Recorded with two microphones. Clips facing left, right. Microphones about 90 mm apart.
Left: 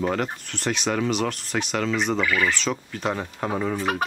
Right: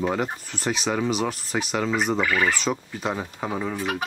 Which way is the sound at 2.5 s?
5° right (ahead or behind).